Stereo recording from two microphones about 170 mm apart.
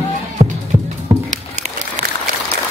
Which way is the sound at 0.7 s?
35° right (ahead or behind).